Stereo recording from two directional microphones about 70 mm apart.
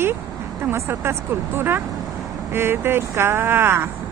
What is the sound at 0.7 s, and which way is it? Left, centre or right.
Speech, right.